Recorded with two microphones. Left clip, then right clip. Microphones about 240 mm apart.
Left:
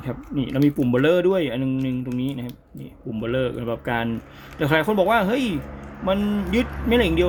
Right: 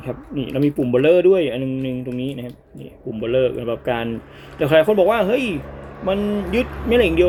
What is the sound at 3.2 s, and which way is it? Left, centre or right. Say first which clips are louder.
Speech: right 6 dB; left.